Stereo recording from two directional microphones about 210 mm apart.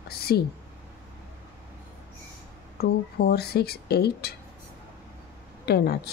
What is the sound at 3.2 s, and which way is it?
A woman's voice, 50° left (ahead or behind).